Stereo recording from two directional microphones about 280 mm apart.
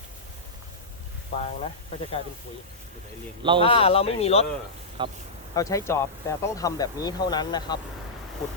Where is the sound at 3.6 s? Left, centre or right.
Centre.